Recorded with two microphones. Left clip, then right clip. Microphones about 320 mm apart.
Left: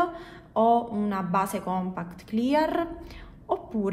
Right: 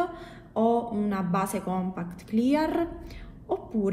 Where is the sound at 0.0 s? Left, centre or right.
Left.